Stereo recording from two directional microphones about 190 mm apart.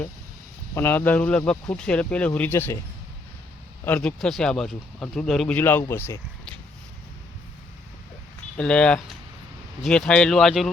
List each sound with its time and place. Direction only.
0.7 s speech: 10° left (ahead or behind)
3.8 s speech: 5° left (ahead or behind)
8.5 s speech: 5° left (ahead or behind)